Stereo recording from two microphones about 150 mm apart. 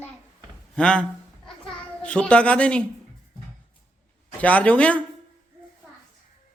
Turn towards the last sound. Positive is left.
turn(degrees=10)  # may be behind; listen again after turning